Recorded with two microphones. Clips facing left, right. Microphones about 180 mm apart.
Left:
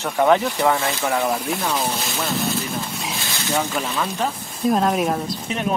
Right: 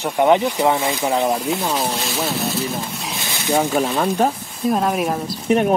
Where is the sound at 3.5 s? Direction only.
35° right (ahead or behind).